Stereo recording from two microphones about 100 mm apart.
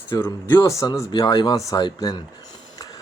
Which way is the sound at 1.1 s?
45° left (ahead or behind).